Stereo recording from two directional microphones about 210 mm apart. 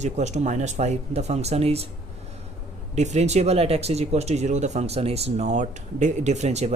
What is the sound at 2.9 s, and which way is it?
Speech, 35° right (ahead or behind).